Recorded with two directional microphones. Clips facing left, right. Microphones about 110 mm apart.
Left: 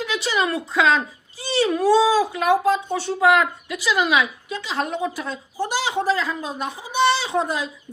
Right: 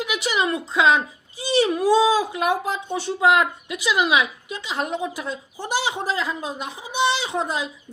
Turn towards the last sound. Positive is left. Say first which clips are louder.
# left 2 dB
turn(degrees=-20)  # may be behind; listen again after turning